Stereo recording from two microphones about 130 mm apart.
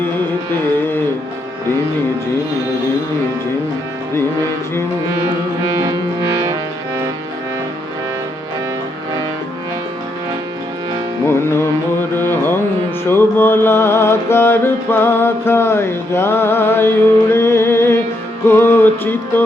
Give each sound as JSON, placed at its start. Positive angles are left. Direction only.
{"t": 0.8, "sound": "music", "side_deg": 15}
{"t": 6.5, "sound": "music", "side_deg": -20}
{"t": 11.3, "sound": "mantra", "side_deg": 20}
{"t": 12.1, "sound": "music", "side_deg": 15}
{"t": 13.1, "sound": "mantra", "side_deg": 15}
{"t": 18.4, "sound": "music", "side_deg": 20}